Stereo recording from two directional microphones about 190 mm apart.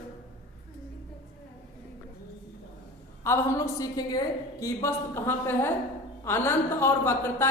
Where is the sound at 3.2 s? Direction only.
15° left (ahead or behind).